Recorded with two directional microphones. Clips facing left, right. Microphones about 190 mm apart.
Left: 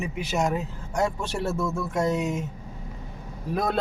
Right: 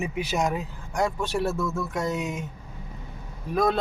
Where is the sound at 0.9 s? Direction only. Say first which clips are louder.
Even; 25° left (ahead or behind).